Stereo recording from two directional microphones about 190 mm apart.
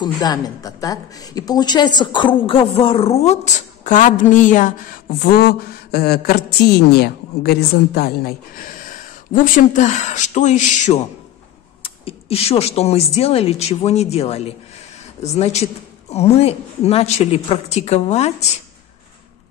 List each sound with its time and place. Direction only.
0.0 s a woman's voice: 20° left (ahead or behind)